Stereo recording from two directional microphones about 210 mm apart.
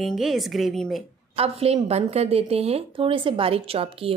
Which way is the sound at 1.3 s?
30° right (ahead or behind).